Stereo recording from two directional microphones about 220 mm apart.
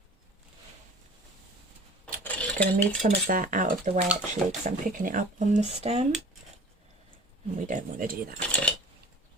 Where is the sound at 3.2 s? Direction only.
40° right (ahead or behind).